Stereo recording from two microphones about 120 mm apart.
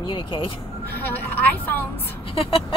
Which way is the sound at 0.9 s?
15° left (ahead or behind).